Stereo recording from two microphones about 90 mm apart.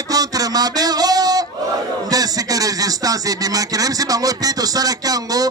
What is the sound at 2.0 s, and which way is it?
Speech, 45° right (ahead or behind).